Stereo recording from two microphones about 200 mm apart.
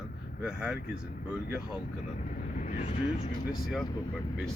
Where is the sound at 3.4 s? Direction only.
50° left (ahead or behind).